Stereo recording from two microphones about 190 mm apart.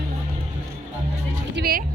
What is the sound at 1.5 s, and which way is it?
Speech, 55° right (ahead or behind).